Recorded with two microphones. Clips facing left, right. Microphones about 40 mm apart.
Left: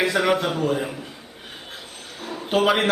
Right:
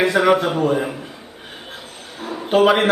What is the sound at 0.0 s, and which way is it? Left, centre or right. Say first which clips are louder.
Speech: right 5 dB; centre.